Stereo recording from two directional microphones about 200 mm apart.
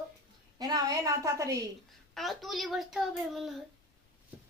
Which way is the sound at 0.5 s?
20° right (ahead or behind).